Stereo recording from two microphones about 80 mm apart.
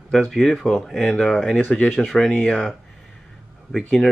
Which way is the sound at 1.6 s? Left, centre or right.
Centre.